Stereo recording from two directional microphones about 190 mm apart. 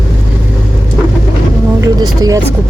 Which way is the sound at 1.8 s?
20° right (ahead or behind).